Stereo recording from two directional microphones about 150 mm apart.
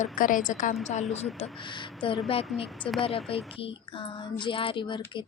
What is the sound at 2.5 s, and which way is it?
Speech, 5° left (ahead or behind).